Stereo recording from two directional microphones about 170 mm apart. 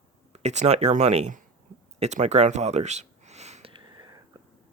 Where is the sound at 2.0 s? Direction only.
40° right (ahead or behind); by 4.2 s 25° right (ahead or behind).